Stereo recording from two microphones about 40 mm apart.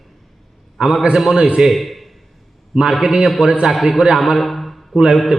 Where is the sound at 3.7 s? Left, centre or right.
Centre.